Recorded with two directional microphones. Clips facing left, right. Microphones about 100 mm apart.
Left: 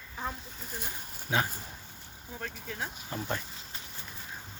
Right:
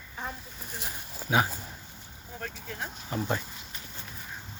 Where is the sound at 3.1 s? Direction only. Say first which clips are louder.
Right 5 dB; 10° right (ahead or behind).